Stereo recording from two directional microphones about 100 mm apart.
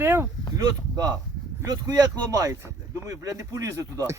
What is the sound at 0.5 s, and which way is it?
A man's voice, 40° right (ahead or behind).